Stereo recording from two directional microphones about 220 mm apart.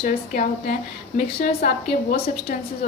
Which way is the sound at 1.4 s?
40° left (ahead or behind).